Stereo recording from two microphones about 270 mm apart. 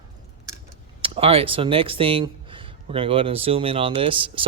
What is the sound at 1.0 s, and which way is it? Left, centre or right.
Speech, right.